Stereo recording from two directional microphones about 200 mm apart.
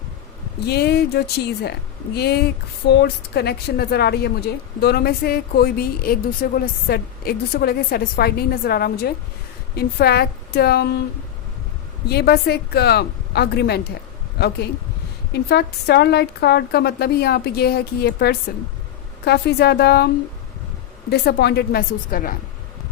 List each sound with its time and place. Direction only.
0.6 s a woman's voice: 55° left (ahead or behind)
12.0 s a woman's voice: 55° left (ahead or behind)
21.1 s a woman's voice: 55° left (ahead or behind)